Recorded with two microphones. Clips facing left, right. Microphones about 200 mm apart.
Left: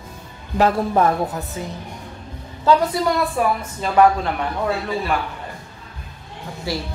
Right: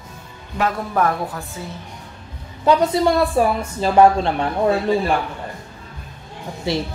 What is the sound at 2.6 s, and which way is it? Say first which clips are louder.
A woman's voice: right 2 dB; 25° right (ahead or behind).